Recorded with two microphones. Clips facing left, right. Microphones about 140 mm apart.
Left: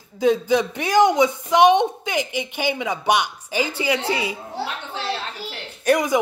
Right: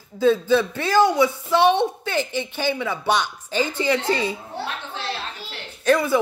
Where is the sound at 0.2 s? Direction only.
15° left (ahead or behind).